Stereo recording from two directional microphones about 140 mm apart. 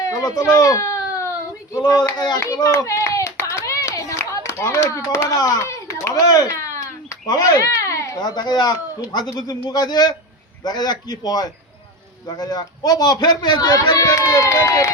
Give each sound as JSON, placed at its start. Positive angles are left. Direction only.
{"t": 0.0, "sound": "baby cry", "side_deg": 25}
{"t": 1.7, "sound": "a child's voice", "side_deg": 30}